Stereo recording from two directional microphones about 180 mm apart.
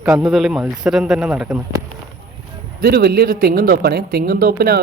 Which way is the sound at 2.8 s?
60° right (ahead or behind).